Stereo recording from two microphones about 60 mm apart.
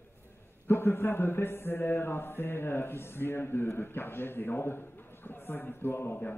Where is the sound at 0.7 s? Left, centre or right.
Left.